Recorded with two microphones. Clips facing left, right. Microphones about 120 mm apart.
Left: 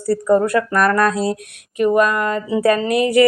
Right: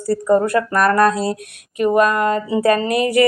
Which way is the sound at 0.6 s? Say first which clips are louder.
Right 1 dB; 35° right (ahead or behind).